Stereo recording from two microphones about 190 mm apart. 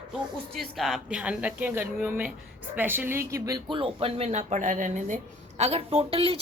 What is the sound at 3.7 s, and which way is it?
Speech, 30° right (ahead or behind).